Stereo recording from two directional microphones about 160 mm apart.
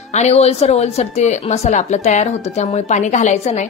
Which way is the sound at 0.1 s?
40° left (ahead or behind).